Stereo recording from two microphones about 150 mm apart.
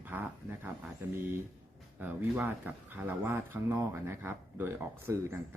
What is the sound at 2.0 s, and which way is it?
Speech, 10° right (ahead or behind).